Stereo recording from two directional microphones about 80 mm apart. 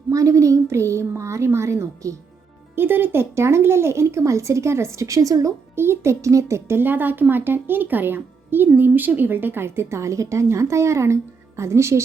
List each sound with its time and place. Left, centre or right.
0.1 s speech: right
2.7 s speech: right
5.7 s speech: right